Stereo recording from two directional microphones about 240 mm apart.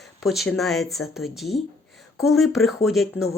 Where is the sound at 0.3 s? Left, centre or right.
Centre.